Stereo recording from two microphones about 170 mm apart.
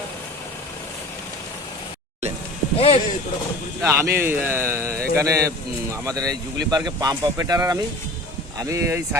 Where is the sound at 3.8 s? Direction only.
20° right (ahead or behind).